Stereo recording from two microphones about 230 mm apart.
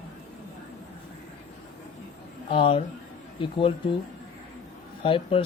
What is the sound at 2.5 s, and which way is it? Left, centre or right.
Speech, left.